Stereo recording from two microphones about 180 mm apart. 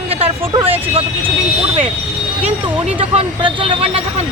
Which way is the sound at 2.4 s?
35° right (ahead or behind).